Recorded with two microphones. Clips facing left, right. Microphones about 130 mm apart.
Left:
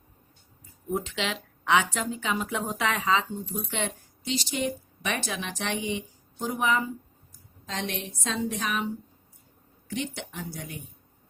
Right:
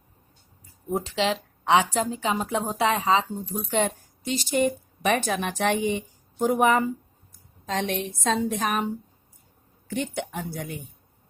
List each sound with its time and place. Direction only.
0.9 s a woman's voice: 35° right (ahead or behind)
9.9 s a woman's voice: 50° right (ahead or behind)